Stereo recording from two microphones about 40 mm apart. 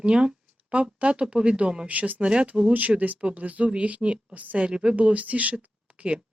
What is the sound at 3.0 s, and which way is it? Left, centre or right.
Speech, right.